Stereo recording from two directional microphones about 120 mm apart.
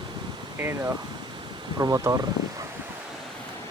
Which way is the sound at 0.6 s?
25° right (ahead or behind).